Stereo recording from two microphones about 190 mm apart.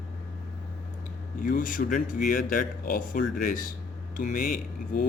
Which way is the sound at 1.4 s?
45° left (ahead or behind).